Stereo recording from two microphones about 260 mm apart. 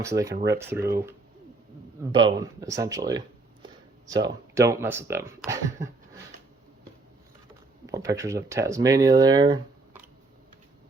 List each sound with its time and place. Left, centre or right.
0.0 s speech: centre
2.1 s speech: centre
7.9 s speech: centre